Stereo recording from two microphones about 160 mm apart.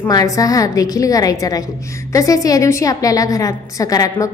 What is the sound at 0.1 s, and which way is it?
A woman's voice, 20° left (ahead or behind).